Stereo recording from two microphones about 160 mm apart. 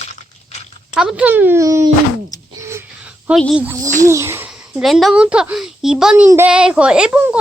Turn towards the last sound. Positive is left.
turn(degrees=-10)  # may be behind; listen again after turning